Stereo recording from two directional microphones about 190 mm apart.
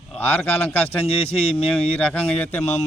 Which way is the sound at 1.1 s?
30° left (ahead or behind).